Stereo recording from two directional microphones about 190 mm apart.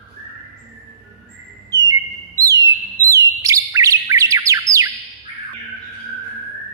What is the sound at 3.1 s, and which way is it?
Bird, 15° right (ahead or behind).